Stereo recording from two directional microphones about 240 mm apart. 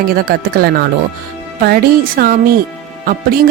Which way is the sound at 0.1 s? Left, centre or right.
Right.